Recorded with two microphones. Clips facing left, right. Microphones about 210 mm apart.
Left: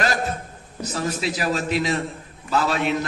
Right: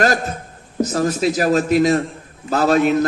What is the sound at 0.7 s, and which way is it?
A man's voice, 45° right (ahead or behind).